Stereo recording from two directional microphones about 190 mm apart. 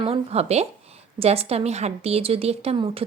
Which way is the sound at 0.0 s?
30° right (ahead or behind).